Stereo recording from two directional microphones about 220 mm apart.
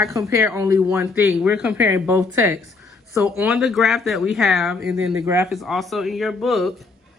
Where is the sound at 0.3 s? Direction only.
10° right (ahead or behind).